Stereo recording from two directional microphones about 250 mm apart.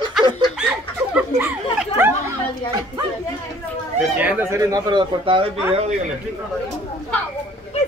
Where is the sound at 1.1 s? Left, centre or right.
Centre.